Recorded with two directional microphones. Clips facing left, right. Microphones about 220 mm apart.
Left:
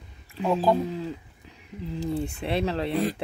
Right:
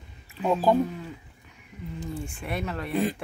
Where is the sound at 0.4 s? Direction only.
Centre (ahead or behind).